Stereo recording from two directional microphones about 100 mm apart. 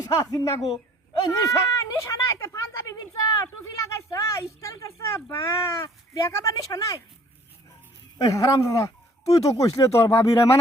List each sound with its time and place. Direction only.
0.3 s speech: 35° left (ahead or behind)
1.3 s a sound: 35° left (ahead or behind)
4.1 s speech: 35° left (ahead or behind)
8.2 s speech: 35° left (ahead or behind)